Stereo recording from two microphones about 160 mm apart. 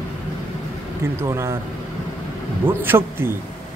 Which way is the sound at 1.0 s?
15° right (ahead or behind).